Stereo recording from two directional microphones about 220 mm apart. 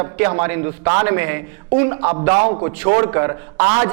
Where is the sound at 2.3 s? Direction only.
35° right (ahead or behind).